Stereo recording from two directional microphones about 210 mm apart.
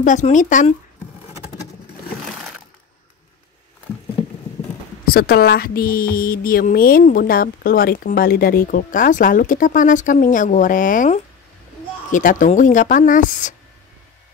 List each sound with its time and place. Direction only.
0.0 s speech: 35° left (ahead or behind)
5.0 s a woman's voice: 45° left (ahead or behind)